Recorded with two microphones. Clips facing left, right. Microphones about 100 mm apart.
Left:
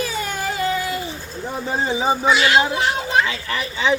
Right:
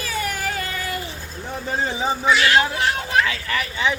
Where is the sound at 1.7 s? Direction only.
15° left (ahead or behind).